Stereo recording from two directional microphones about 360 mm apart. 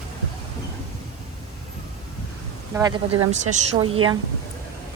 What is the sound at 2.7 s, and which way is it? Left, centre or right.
Speech, centre.